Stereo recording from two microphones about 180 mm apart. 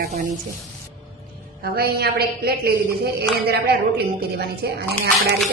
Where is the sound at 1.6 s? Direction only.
60° right (ahead or behind).